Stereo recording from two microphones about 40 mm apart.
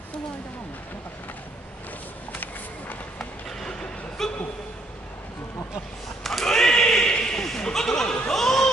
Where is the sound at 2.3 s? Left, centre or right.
Left.